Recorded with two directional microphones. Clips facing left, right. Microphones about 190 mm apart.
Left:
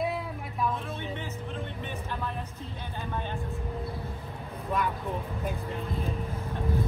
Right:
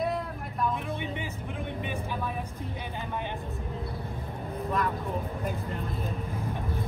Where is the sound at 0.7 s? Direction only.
15° right (ahead or behind).